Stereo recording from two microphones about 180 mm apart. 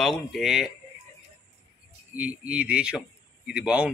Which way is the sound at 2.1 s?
5° right (ahead or behind).